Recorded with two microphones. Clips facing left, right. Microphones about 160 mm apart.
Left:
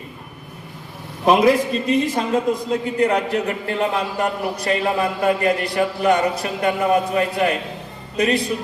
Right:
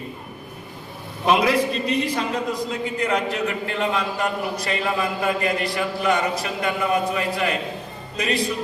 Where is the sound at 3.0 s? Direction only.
35° left (ahead or behind).